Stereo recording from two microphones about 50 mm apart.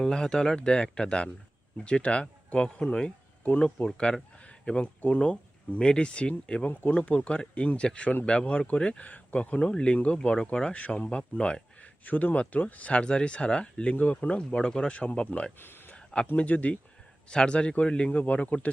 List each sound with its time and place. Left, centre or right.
0.0 s speech: centre
10.8 s speech: left
12.0 s speech: left
18.2 s speech: left